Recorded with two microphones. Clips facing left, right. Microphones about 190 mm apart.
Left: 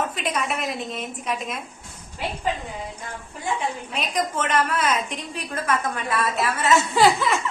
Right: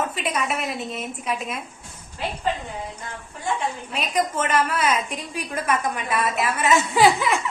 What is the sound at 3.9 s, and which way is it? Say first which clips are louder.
A woman's voice: right 3 dB; 5° right (ahead or behind).